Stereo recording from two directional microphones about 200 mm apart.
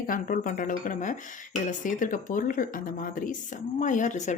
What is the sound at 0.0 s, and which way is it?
Speech, 45° left (ahead or behind).